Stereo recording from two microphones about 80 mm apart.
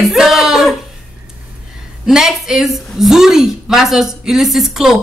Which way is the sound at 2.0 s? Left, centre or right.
Centre.